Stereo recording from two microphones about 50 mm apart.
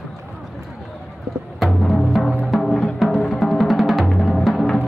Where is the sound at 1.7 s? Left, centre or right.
Centre.